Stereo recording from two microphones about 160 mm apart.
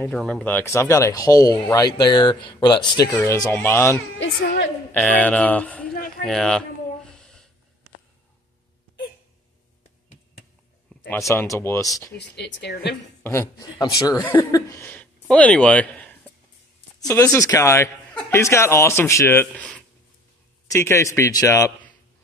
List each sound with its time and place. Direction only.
0.0 s speech: 5° left (ahead or behind)
7.1 s a sound: 5° left (ahead or behind)
11.1 s speech: 15° left (ahead or behind)
12.2 s speech: 90° left
13.2 s speech: 15° left (ahead or behind)
17.0 s speech: 20° left (ahead or behind)
20.7 s speech: 20° left (ahead or behind)